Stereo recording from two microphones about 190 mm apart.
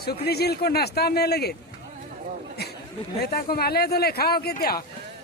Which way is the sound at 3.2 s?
50° left (ahead or behind).